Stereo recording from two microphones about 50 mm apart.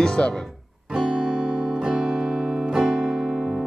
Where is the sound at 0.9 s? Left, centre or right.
Centre.